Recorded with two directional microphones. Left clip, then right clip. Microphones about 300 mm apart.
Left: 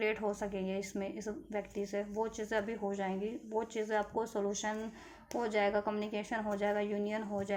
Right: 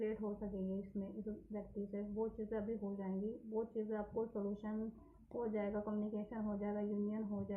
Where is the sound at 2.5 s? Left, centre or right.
Left.